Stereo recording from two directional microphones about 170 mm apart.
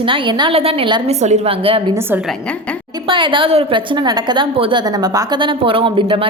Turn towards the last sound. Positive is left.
turn(degrees=-30)  # may be behind; listen again after turning